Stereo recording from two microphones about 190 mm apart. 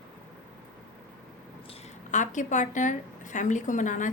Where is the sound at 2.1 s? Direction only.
40° left (ahead or behind).